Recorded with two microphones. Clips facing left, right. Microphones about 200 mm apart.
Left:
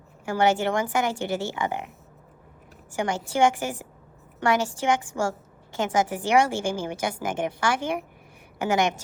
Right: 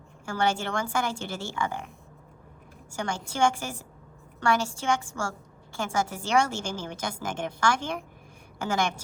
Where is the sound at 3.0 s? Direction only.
15° left (ahead or behind).